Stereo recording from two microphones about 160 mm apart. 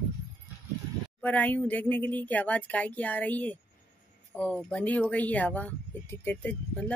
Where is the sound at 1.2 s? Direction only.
10° left (ahead or behind).